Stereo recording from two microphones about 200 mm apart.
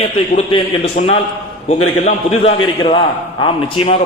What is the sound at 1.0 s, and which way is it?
A man's voice, 40° left (ahead or behind).